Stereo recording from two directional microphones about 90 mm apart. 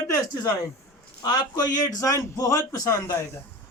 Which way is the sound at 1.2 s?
50° left (ahead or behind).